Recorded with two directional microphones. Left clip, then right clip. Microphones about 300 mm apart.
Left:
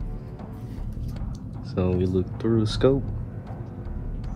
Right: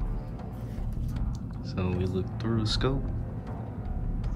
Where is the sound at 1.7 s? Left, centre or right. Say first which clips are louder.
Left 8 dB; centre.